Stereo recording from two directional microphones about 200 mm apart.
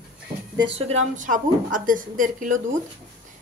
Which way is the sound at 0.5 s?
30° right (ahead or behind).